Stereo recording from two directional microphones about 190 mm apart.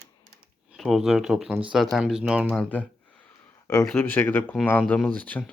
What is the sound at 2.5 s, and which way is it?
Speech, 5° left (ahead or behind).